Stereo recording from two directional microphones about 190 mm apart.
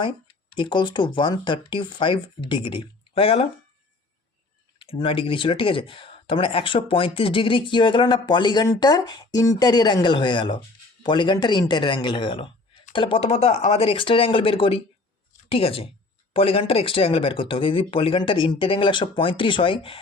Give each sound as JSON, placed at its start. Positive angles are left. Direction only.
{"t": 0.5, "sound": "speech", "side_deg": 25}
{"t": 4.8, "sound": "speech", "side_deg": 25}